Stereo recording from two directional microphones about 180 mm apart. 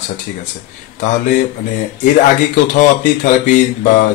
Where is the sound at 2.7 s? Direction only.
45° left (ahead or behind).